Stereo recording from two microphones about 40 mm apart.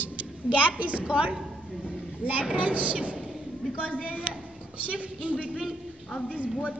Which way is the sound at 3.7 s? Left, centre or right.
Left.